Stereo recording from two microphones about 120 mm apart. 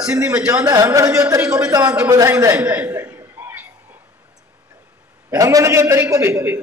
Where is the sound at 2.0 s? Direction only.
25° right (ahead or behind).